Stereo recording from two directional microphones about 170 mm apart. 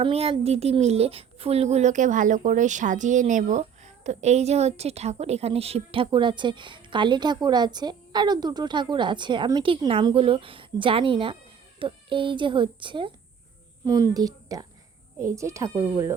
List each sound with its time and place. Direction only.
0.0 s a woman's voice: 35° right (ahead or behind); by 16.1 s 15° right (ahead or behind)